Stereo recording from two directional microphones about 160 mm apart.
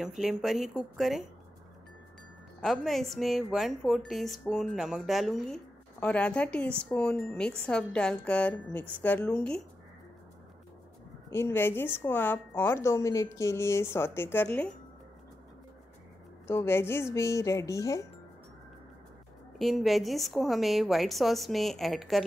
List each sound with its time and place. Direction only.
0.0 s a woman's voice: centre (ahead or behind)
2.6 s a woman's voice: centre (ahead or behind)
11.2 s speech: 15° left (ahead or behind)
16.4 s speech: 15° left (ahead or behind)
19.6 s a woman's voice: centre (ahead or behind)